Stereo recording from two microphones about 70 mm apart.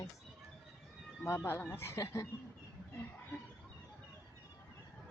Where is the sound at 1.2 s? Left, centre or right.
Left.